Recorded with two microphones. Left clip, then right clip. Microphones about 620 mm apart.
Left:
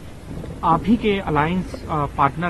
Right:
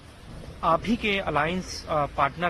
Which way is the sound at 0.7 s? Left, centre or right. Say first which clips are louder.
Left 5 dB; right.